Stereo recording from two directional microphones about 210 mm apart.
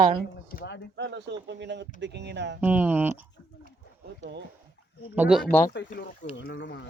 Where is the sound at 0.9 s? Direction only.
55° right (ahead or behind).